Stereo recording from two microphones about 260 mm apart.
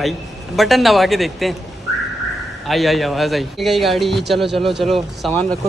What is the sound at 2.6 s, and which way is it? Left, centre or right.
Speech, centre.